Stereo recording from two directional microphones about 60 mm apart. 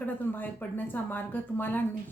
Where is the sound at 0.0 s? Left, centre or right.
Left.